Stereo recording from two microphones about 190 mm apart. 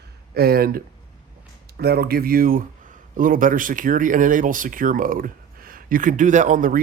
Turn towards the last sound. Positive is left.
turn(degrees=-45)  # may be behind; listen again after turning